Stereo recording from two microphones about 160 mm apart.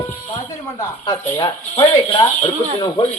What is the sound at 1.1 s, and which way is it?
Speech, 20° left (ahead or behind).